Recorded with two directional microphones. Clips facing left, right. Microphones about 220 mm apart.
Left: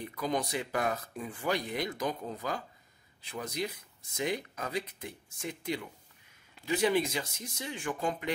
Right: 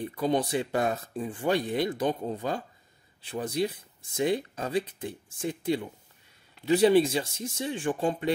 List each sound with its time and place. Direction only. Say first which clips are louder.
0.0 s speech: right 6 dB; 30° right (ahead or behind)